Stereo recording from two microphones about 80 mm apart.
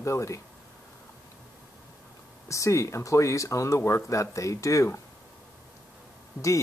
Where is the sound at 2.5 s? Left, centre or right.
Left.